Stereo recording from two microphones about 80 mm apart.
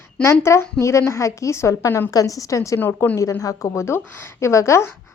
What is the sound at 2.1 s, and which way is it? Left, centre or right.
A woman's voice, left.